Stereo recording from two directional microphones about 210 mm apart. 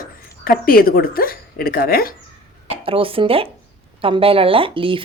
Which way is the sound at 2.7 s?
25° right (ahead or behind).